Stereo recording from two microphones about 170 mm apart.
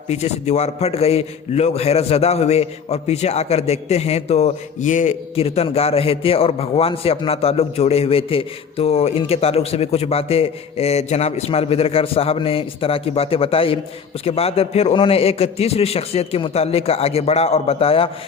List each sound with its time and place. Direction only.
0.1 s a man's voice: 40° left (ahead or behind)
5.3 s a man's voice: 35° left (ahead or behind)